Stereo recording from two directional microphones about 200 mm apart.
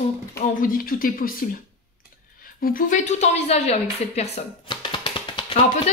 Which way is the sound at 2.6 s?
40° left (ahead or behind).